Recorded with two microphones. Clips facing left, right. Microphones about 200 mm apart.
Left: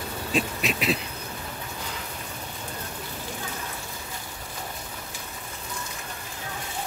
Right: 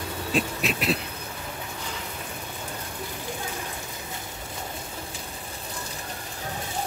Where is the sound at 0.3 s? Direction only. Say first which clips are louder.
Even; centre (ahead or behind).